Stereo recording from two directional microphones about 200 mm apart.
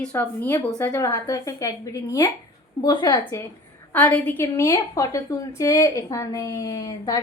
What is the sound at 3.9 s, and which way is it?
Speech, 10° left (ahead or behind).